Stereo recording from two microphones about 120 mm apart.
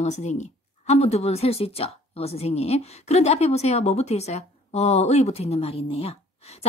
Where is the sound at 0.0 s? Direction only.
70° left (ahead or behind).